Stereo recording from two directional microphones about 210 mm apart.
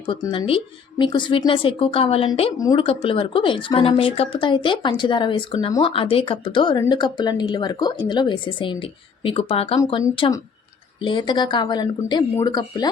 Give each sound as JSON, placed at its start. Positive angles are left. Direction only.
{"t": 0.0, "sound": "speech", "side_deg": 25}